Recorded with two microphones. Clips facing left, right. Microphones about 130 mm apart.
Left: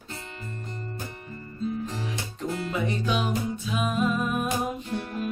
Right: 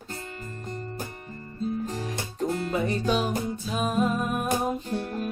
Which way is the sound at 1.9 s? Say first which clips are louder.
Right 1 dB; 45° right (ahead or behind).